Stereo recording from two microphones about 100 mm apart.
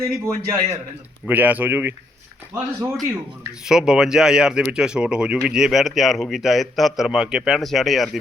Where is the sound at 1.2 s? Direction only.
15° right (ahead or behind).